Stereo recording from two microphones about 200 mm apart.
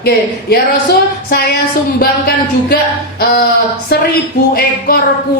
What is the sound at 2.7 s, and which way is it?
Speech, 50° left (ahead or behind).